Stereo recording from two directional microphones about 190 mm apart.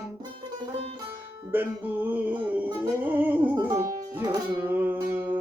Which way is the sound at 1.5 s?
10° right (ahead or behind).